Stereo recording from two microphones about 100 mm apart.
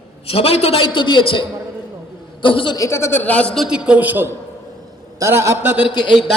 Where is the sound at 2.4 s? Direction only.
55° left (ahead or behind).